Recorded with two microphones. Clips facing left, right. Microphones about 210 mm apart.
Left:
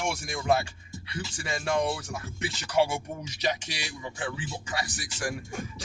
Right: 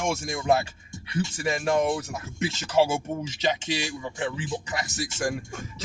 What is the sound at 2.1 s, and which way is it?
Speech, 20° right (ahead or behind).